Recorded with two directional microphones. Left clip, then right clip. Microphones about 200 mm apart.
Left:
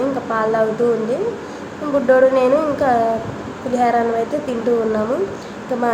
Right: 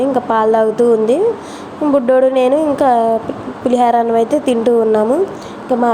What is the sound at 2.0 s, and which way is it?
A woman's voice, 35° right (ahead or behind).